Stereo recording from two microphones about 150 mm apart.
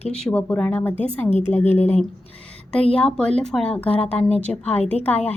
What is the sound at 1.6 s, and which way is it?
Speech, 45° left (ahead or behind).